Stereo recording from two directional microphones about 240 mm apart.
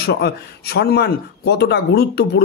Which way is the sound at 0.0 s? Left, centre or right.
Left.